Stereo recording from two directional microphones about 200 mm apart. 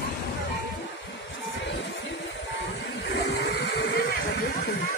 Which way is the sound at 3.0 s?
60° left (ahead or behind).